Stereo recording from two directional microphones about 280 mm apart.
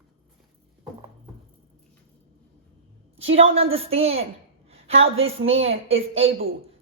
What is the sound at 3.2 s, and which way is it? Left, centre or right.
Speech, right.